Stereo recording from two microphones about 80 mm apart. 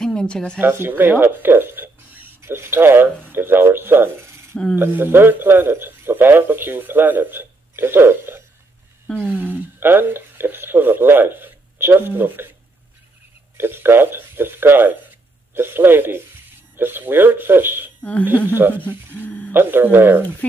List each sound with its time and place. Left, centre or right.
0.0 s a woman's voice: centre
0.6 s speech: right
13.6 s speech: right
19.1 s speech: left
19.5 s speech: right